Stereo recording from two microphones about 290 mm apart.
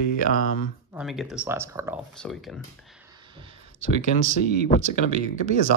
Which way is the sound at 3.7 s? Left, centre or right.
Right.